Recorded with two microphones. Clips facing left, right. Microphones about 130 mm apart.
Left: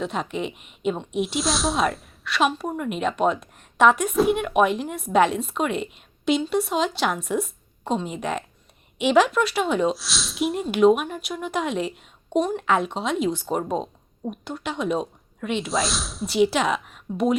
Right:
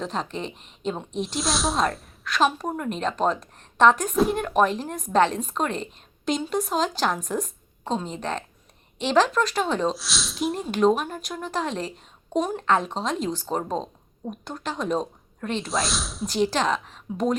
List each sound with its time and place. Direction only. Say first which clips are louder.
0.0 s a woman's voice: left 2 dB; 5° left (ahead or behind)